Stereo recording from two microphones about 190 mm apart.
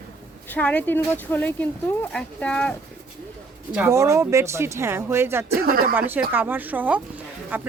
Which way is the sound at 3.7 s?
10° right (ahead or behind).